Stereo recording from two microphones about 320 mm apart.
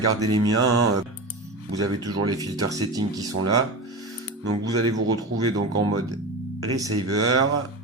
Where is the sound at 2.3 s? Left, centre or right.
Centre.